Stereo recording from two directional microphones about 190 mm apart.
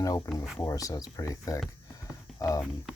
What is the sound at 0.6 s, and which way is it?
Speech, 15° left (ahead or behind).